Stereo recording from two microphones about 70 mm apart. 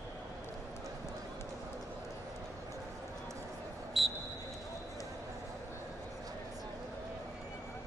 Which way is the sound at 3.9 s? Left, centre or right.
Centre.